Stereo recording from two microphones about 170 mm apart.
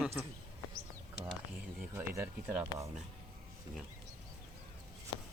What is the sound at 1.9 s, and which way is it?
Speech, 15° right (ahead or behind).